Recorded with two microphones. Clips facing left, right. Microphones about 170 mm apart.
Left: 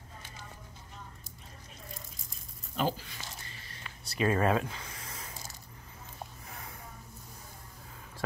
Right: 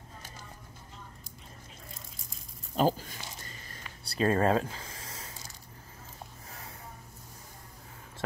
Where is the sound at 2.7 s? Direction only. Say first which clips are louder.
Right 5 dB; 40° right (ahead or behind).